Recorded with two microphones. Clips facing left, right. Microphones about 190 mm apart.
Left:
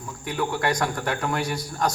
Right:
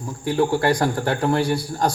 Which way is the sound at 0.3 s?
30° right (ahead or behind).